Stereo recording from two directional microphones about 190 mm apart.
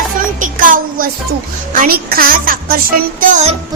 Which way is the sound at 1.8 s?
50° right (ahead or behind).